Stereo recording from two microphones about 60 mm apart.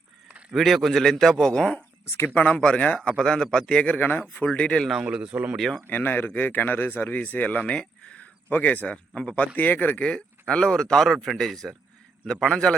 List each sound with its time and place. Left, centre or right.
0.5 s a man's voice: centre
2.2 s speech: left
2.5 s a man's voice: centre
4.4 s speech: centre
5.1 s speech: centre
5.5 s a man's voice: centre
5.9 s a man's voice: left
10.0 s speech: centre